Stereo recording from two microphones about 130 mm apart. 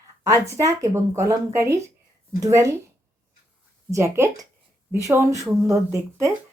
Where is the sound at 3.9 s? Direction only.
20° right (ahead or behind).